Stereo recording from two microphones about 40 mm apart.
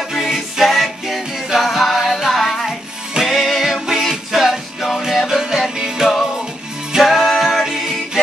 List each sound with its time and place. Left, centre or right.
0.1 s music: centre